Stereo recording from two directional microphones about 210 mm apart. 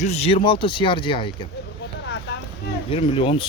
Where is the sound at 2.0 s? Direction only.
55° left (ahead or behind).